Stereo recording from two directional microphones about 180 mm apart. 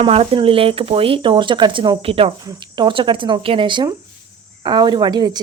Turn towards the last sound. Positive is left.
turn(degrees=-25)  # may be behind; listen again after turning